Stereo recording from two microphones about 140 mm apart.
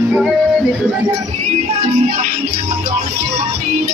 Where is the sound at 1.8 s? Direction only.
55° right (ahead or behind).